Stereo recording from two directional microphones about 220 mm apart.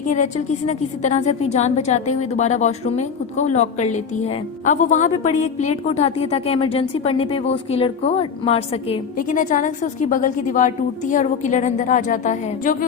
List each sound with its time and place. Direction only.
0.1 s a woman's voice: 30° left (ahead or behind)